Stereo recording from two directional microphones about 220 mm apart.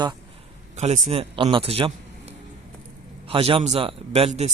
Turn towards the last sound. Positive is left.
turn(degrees=-30)  # may be behind; listen again after turning